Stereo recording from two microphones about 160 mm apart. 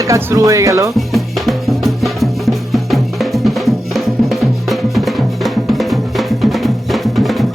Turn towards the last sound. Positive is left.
turn(degrees=0)  # may be behind; listen again after turning